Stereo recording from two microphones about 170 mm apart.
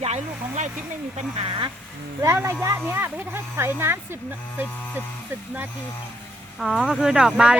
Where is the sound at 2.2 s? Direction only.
15° right (ahead or behind).